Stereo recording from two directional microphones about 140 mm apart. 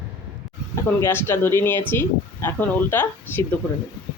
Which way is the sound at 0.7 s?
15° left (ahead or behind).